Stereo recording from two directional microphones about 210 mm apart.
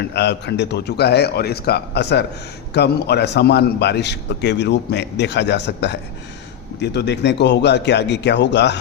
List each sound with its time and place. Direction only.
0.0 s a man's voice: 50° left (ahead or behind)